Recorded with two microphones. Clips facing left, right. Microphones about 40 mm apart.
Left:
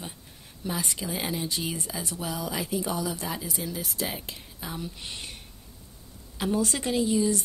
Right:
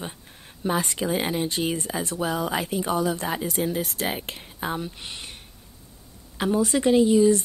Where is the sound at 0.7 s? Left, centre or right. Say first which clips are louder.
Right 7 dB; right.